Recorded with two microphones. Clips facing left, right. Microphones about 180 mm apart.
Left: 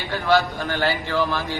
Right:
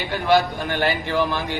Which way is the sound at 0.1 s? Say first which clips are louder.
Right 1 dB; 15° right (ahead or behind).